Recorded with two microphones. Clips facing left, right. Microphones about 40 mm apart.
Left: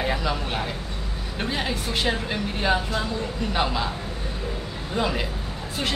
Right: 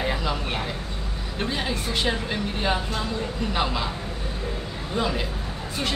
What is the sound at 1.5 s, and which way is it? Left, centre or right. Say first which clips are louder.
Speech: left 1 dB; centre.